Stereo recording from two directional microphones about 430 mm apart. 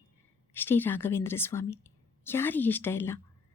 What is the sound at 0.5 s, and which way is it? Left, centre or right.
Speech, centre.